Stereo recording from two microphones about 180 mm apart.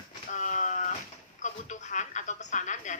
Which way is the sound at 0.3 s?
45° left (ahead or behind).